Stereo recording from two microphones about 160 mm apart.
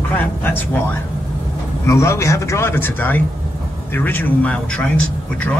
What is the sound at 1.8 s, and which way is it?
A man's voice, 20° left (ahead or behind).